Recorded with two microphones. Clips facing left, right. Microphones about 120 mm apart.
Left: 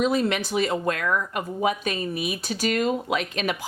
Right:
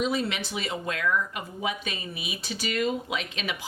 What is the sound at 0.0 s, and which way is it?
Speech, 50° left (ahead or behind).